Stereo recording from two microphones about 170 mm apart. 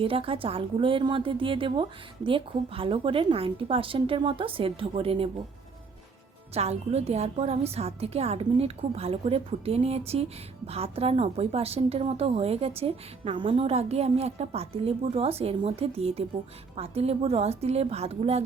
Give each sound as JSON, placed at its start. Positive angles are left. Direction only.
{"t": 0.0, "sound": "a woman's voice", "side_deg": -30}
{"t": 6.5, "sound": "a woman's voice", "side_deg": -40}